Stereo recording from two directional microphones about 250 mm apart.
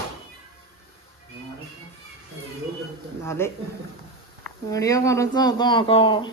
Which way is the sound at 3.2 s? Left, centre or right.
Centre.